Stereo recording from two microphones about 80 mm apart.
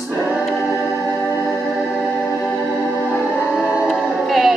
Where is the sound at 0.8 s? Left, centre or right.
Centre.